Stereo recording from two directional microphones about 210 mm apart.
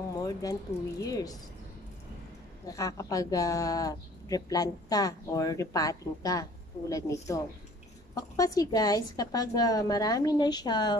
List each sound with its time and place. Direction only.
0.1 s speech: 15° left (ahead or behind)
2.6 s speech: 15° left (ahead or behind)